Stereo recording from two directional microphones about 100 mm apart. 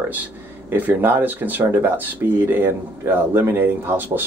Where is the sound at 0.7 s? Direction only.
20° right (ahead or behind).